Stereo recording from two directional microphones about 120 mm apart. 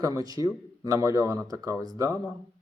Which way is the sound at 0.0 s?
30° right (ahead or behind).